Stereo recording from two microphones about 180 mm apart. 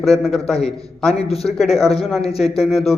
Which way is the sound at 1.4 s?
Centre (ahead or behind).